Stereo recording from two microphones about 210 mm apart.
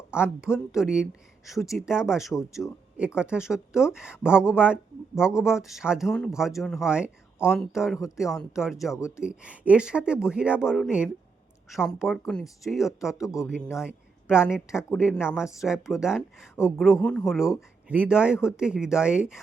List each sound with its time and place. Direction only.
0.1 s a woman's voice: 5° right (ahead or behind)
9.0 s speech: 15° left (ahead or behind)
9.2 s a woman's voice: 5° right (ahead or behind)
13.1 s speech: 15° left (ahead or behind)
13.5 s a woman's voice: centre (ahead or behind)